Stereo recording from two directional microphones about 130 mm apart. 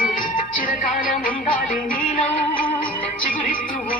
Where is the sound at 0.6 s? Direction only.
90° left.